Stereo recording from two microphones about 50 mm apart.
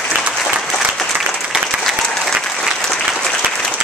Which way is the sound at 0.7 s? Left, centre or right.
Centre.